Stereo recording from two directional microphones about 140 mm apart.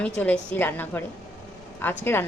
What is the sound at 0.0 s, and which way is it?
Speech, 10° left (ahead or behind).